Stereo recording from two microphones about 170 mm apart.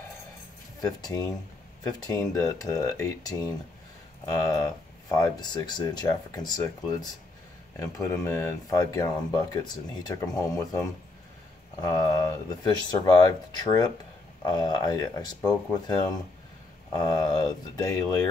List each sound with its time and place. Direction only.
0.7 s speech: 20° left (ahead or behind)
14.4 s speech: 25° left (ahead or behind)